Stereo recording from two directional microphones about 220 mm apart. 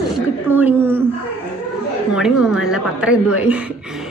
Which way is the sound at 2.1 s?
5° right (ahead or behind).